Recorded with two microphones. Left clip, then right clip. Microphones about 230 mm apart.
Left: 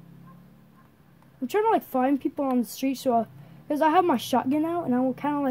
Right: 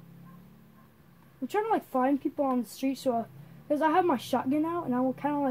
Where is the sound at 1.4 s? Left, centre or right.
Left.